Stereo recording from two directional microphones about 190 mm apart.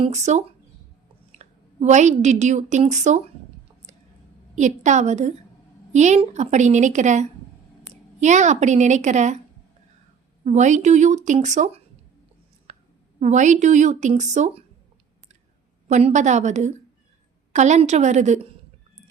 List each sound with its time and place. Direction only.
0.0 s a woman's voice: 35° right (ahead or behind)
4.5 s speech: 40° right (ahead or behind)
10.4 s speech: 40° right (ahead or behind)
12.7 s a sound: 40° right (ahead or behind)
13.1 s speech: 40° right (ahead or behind)
15.9 s speech: 35° right (ahead or behind)